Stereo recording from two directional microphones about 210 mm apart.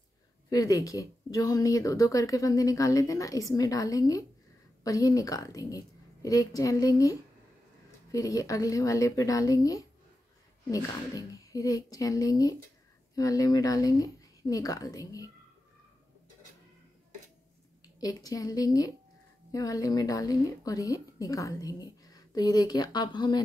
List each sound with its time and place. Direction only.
0.5 s speech: 15° left (ahead or behind)
18.0 s speech: 15° left (ahead or behind)